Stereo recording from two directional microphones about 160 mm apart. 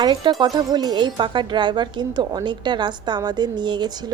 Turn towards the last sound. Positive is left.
turn(degrees=-25)  # may be behind; listen again after turning